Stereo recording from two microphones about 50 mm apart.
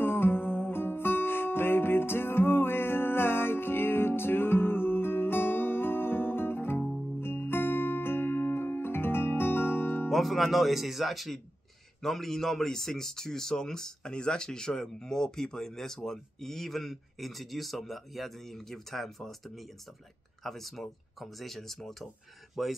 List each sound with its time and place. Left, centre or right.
0.0 s music: left
10.0 s speech: centre